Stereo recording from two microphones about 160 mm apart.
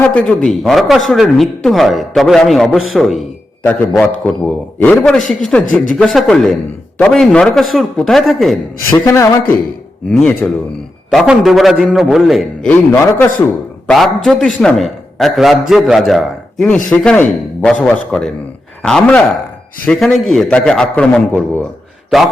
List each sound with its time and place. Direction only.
0.0 s a man's voice: 10° left (ahead or behind)
3.6 s a man's voice: 10° left (ahead or behind)
8.9 s a man's voice: 20° left (ahead or behind)
10.1 s a man's voice: 5° left (ahead or behind)
13.8 s a man's voice: 5° left (ahead or behind)